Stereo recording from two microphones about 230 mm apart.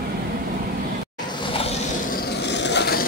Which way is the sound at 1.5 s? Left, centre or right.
Left.